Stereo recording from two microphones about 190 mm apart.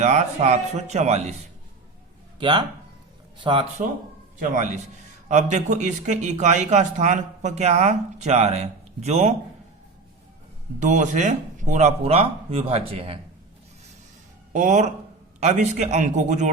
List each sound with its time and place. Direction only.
0.0 s speech: 35° right (ahead or behind)
2.4 s speech: 25° right (ahead or behind)
4.4 s speech: 40° right (ahead or behind)
10.8 s speech: 40° right (ahead or behind)
14.5 s speech: 40° right (ahead or behind)